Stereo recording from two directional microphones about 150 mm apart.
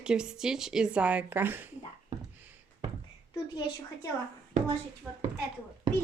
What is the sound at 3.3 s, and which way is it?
Speech, 25° left (ahead or behind).